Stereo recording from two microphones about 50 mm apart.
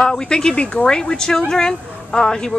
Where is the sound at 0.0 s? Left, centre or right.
Centre.